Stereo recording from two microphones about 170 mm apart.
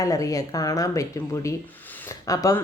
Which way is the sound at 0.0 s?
20° left (ahead or behind).